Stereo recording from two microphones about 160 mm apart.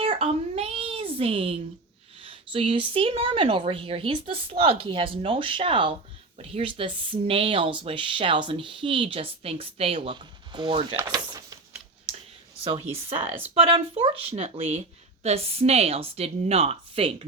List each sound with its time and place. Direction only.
0.0 s a sound: 35° right (ahead or behind)
2.2 s speech: 35° right (ahead or behind)
12.6 s speech: 40° right (ahead or behind)